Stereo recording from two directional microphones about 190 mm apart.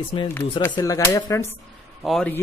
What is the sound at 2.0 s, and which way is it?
Speech, centre (ahead or behind).